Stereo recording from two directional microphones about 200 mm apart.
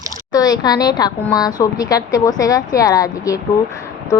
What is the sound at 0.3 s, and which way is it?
Speech, 20° left (ahead or behind).